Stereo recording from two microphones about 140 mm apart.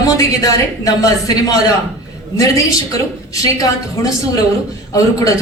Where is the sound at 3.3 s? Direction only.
25° left (ahead or behind).